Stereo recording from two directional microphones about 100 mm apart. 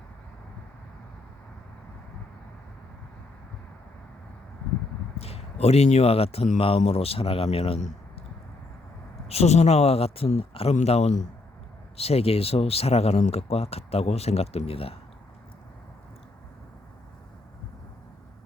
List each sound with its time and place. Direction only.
5.1 s speech: 85° left
9.2 s speech: 90° left; by 14.9 s 70° left (ahead or behind)